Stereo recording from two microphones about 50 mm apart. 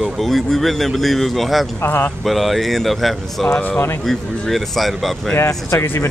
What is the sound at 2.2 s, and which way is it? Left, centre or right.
Speech, centre.